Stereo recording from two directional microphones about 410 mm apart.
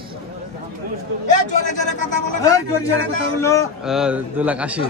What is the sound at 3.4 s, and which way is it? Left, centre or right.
A man's voice, centre.